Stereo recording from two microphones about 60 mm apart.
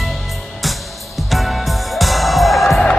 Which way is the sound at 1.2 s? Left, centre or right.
Centre.